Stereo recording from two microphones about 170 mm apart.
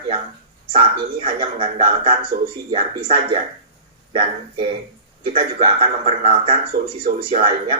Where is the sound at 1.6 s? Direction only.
55° right (ahead or behind).